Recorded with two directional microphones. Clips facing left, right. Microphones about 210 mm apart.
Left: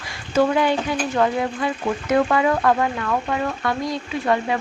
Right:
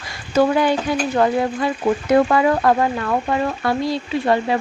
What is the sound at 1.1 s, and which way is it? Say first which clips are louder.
Speech: right 3 dB; 35° right (ahead or behind).